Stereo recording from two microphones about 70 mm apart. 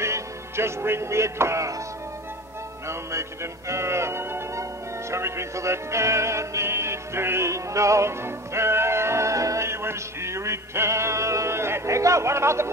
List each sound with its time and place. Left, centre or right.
0.0 s music: right
2.9 s music: right